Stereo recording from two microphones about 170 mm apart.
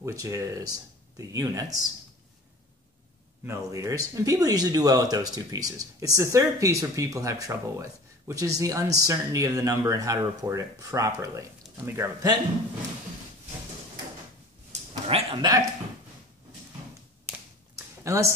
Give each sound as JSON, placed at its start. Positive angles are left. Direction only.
{"t": 0.0, "sound": "speech", "side_deg": -20}
{"t": 3.4, "sound": "speech", "side_deg": -20}
{"t": 14.7, "sound": "a sound", "side_deg": -35}
{"t": 18.0, "sound": "speech", "side_deg": -20}